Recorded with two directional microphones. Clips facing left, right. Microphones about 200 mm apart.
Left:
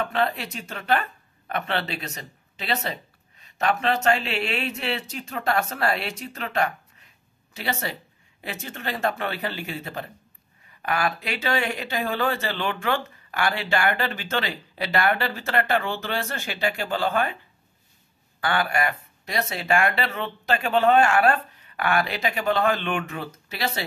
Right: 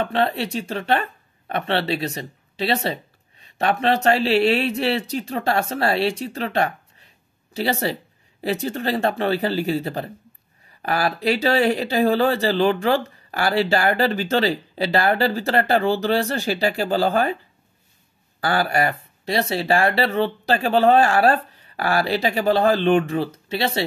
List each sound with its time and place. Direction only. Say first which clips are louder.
0.0 s speech: right 4 dB; 30° right (ahead or behind)
18.4 s speech: right 4 dB; 35° right (ahead or behind)